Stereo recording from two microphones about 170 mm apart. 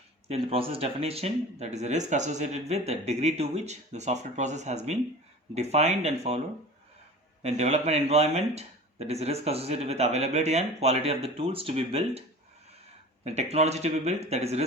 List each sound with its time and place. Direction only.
0.3 s speech: 35° right (ahead or behind)
7.4 s speech: 40° right (ahead or behind)
13.2 s speech: 40° right (ahead or behind)